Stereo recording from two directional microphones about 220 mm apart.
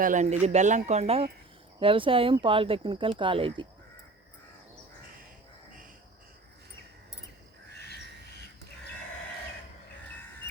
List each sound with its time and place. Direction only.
0.0 s speech: 35° right (ahead or behind)